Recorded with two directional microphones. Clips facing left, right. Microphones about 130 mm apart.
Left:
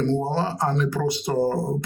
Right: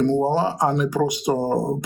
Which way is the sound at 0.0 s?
15° right (ahead or behind).